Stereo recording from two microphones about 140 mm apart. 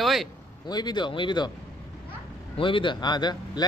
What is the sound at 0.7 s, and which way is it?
Speech, 30° left (ahead or behind).